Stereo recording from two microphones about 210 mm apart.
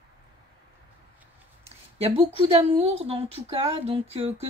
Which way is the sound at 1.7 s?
30° right (ahead or behind).